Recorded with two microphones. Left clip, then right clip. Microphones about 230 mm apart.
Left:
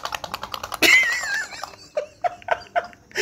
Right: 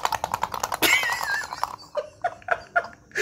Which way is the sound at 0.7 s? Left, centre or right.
Right.